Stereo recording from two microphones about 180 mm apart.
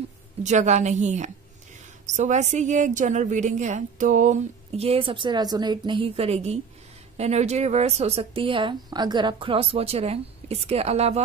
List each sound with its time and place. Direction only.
0.4 s a woman's voice: 40° right (ahead or behind)